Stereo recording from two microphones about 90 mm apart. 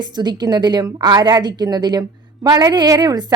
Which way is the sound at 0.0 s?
55° right (ahead or behind).